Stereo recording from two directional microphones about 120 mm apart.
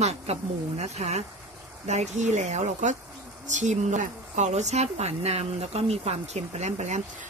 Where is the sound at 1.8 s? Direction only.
75° right (ahead or behind).